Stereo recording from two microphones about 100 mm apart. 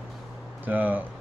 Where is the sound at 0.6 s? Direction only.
15° right (ahead or behind).